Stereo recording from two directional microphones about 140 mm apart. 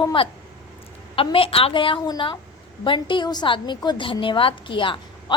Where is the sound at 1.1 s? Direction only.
40° left (ahead or behind).